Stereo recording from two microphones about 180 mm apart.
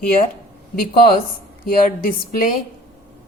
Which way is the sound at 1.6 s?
55° left (ahead or behind).